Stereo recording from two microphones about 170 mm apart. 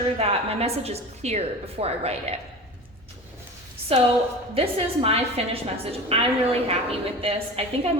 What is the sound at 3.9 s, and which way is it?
A woman's voice, 35° right (ahead or behind).